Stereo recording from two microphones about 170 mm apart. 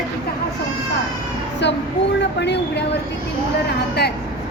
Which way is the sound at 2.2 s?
90° left.